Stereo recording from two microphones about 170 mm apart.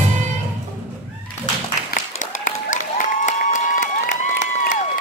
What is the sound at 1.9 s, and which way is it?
Applause, 50° left (ahead or behind).